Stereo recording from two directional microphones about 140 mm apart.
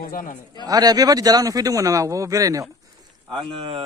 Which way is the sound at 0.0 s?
85° left.